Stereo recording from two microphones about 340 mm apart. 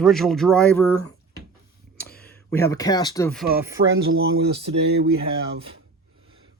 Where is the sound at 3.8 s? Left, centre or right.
Right.